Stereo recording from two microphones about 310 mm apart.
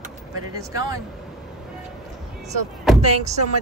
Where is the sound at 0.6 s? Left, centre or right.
Centre.